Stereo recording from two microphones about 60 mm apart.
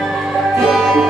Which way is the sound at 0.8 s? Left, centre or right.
Centre.